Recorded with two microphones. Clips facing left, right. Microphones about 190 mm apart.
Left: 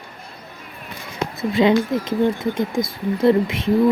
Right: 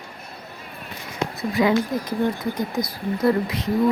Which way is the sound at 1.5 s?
25° left (ahead or behind).